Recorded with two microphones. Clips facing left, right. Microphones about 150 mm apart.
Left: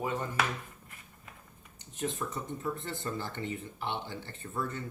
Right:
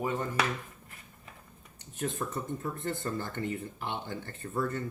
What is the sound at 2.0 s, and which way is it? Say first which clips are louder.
Speech: right 1 dB; 50° right (ahead or behind).